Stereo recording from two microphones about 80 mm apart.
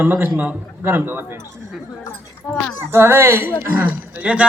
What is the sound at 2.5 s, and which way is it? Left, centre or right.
Speech, centre.